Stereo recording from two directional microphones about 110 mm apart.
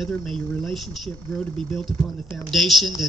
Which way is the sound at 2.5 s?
Centre (ahead or behind).